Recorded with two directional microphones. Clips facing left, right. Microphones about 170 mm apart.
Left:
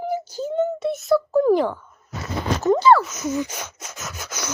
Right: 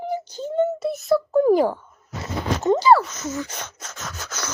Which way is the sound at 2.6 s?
15° right (ahead or behind).